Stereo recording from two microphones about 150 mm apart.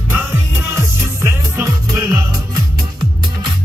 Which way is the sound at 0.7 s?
20° right (ahead or behind).